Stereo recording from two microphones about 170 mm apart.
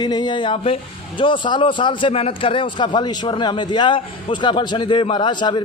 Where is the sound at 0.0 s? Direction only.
25° left (ahead or behind).